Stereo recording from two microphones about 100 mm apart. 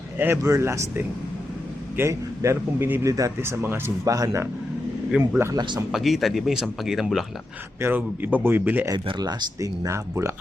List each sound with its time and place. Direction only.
0.2 s speech: 25° right (ahead or behind)
3.0 s speech: 35° right (ahead or behind)
5.1 s speech: 10° right (ahead or behind)
5.5 s speech: 45° right (ahead or behind)
5.9 s speech: centre (ahead or behind)
7.8 s speech: 20° right (ahead or behind)
9.0 s speech: 45° right (ahead or behind); by 10.3 s 30° right (ahead or behind)